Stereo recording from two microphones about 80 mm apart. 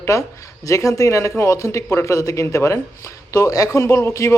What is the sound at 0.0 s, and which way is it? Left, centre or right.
Speech, left.